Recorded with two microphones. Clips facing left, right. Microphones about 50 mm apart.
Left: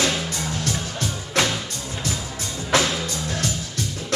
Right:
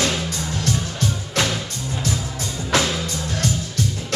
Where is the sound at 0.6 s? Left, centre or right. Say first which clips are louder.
Right 3 dB; left.